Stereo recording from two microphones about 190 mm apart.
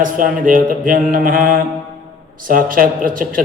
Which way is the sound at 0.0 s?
45° right (ahead or behind).